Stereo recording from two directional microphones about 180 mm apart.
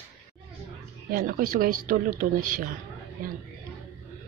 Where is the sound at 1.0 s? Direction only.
55° right (ahead or behind).